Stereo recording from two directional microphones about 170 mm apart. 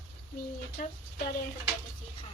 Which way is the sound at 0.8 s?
55° left (ahead or behind).